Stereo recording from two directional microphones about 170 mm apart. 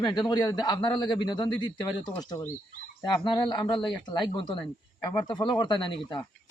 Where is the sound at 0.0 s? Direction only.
25° left (ahead or behind).